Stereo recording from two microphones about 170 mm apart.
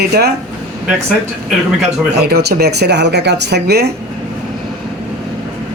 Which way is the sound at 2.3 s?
70° right (ahead or behind).